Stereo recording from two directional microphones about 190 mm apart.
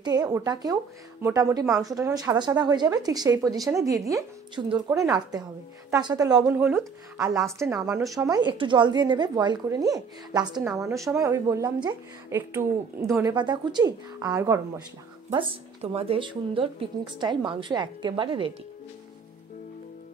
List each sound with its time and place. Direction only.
0.0 s a woman's voice: 20° right (ahead or behind)
6.6 s speech: centre (ahead or behind)
7.2 s a woman's voice: 15° right (ahead or behind)
15.2 s a woman's voice: 30° right (ahead or behind)